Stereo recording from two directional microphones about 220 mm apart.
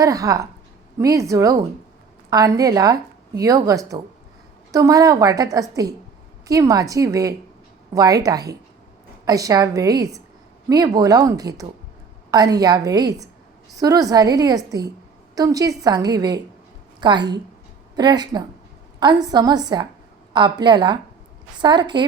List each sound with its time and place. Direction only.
0.0 s a woman's voice: 15° right (ahead or behind)